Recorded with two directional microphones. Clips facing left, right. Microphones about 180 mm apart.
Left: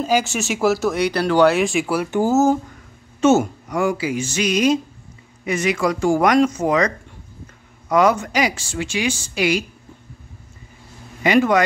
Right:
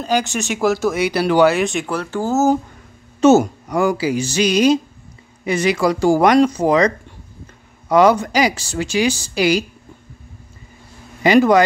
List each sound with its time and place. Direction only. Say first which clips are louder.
0.0 s speech: even; 5° left (ahead or behind)
3.2 s speech: right 4 dB; 35° right (ahead or behind)
7.9 s speech: right 3 dB; 30° right (ahead or behind)
11.2 s speech: right 4 dB; 35° right (ahead or behind)